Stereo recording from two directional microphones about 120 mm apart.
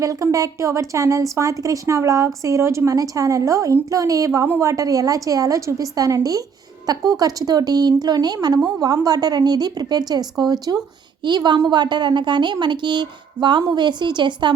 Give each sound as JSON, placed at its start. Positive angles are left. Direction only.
{"t": 0.0, "sound": "a woman's voice", "side_deg": -30}